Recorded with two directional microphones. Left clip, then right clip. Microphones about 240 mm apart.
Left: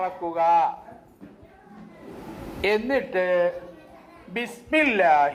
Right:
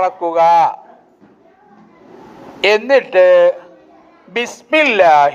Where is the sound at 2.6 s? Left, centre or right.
Right.